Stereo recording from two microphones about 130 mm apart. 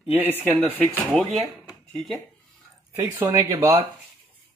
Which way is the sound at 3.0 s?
20° right (ahead or behind).